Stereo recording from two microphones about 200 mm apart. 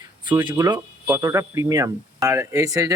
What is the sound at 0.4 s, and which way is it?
Speech, 20° right (ahead or behind).